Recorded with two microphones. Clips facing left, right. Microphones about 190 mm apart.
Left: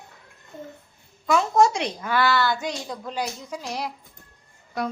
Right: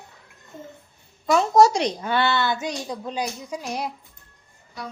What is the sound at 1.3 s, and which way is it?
A woman's voice, 40° right (ahead or behind).